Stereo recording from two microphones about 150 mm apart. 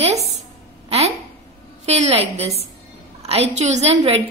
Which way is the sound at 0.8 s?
45° right (ahead or behind).